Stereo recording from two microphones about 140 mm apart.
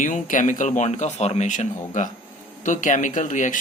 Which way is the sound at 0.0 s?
65° left (ahead or behind).